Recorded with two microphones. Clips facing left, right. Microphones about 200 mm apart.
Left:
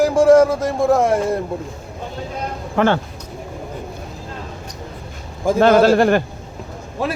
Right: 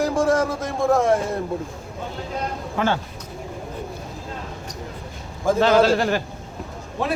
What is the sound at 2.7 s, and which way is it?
Speech, 65° left (ahead or behind).